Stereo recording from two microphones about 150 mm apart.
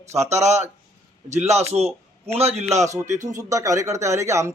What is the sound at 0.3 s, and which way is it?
A man's voice, 50° right (ahead or behind).